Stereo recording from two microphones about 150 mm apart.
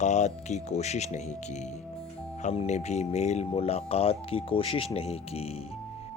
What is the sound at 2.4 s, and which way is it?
Speech, 50° left (ahead or behind).